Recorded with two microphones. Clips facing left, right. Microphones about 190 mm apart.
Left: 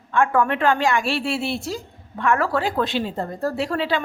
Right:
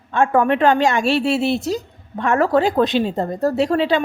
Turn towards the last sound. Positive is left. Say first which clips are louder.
# right 6 dB
turn(degrees=-20)  # may be behind; listen again after turning